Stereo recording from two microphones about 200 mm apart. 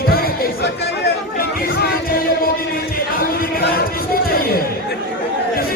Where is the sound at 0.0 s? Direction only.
50° left (ahead or behind).